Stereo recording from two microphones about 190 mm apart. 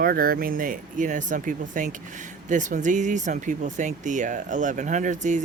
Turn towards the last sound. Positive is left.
turn(degrees=-40)  # may be behind; listen again after turning